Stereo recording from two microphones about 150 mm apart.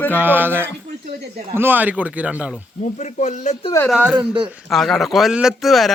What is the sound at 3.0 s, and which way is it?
Speech, 50° left (ahead or behind).